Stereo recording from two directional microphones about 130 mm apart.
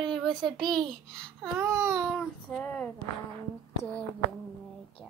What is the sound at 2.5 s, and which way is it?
Speech, 10° left (ahead or behind).